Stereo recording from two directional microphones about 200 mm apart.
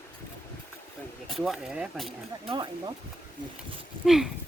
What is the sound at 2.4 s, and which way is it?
Speech, 25° right (ahead or behind).